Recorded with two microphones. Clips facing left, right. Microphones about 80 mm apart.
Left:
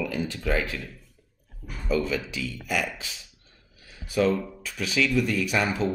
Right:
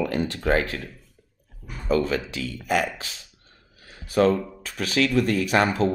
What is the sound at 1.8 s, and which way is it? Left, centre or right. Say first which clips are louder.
Speech: right 3 dB; right.